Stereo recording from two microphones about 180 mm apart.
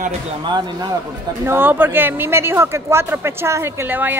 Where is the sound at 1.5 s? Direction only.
10° right (ahead or behind).